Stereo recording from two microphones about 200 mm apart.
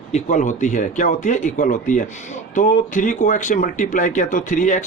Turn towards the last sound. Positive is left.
turn(degrees=40)  # may be behind; listen again after turning